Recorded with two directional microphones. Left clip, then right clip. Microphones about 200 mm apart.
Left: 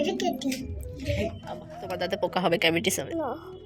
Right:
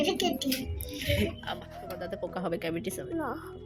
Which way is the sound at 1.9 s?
10° left (ahead or behind).